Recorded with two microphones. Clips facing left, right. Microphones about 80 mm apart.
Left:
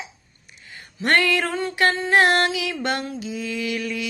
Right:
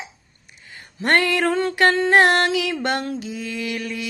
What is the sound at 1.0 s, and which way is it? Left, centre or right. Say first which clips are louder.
Music: right 1 dB; right.